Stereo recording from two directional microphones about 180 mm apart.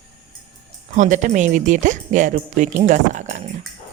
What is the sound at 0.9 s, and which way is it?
Speech, 40° right (ahead or behind).